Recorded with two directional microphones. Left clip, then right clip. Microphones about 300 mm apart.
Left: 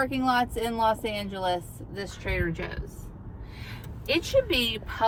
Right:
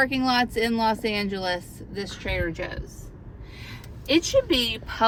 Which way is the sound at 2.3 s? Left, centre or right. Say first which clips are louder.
Right 2 dB; right.